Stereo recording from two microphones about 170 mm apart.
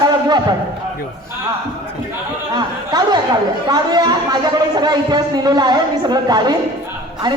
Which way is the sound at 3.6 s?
25° right (ahead or behind).